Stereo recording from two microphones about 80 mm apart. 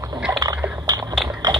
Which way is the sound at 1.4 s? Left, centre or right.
Right.